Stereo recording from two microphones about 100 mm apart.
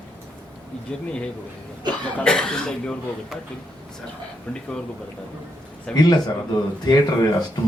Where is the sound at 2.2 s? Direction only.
5° left (ahead or behind).